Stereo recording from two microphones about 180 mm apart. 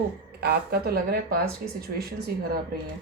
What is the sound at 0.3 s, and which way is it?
A woman's voice, 60° right (ahead or behind).